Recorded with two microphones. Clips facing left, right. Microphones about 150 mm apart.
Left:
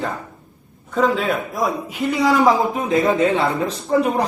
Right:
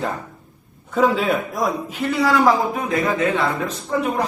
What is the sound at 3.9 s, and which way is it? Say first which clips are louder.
Speech: left 5 dB; 35° left (ahead or behind).